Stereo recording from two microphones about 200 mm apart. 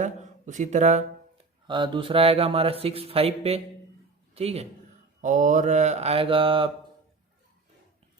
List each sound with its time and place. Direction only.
0.0 s speech: 40° right (ahead or behind)
1.6 s speech: 25° right (ahead or behind)
5.2 s mantra: 40° right (ahead or behind)